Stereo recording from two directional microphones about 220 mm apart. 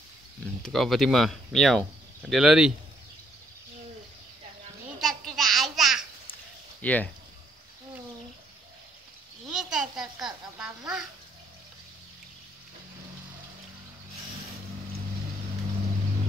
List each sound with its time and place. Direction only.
0.6 s speech: centre (ahead or behind)
5.0 s babbling: centre (ahead or behind)
6.8 s speech: 5° left (ahead or behind)
9.5 s a sound: centre (ahead or behind)